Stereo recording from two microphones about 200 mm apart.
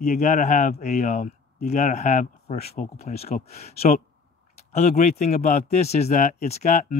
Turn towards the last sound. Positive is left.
turn(degrees=35)  # may be behind; listen again after turning